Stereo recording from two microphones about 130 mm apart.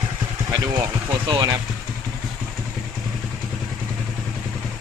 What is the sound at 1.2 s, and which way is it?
Speech, 30° right (ahead or behind).